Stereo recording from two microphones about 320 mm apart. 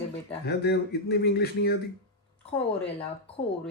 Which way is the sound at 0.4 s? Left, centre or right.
Left.